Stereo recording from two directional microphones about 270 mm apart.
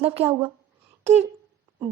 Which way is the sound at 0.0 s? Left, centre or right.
Centre.